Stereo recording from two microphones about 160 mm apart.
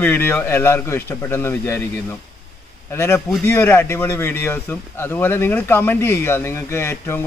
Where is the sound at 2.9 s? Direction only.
15° left (ahead or behind).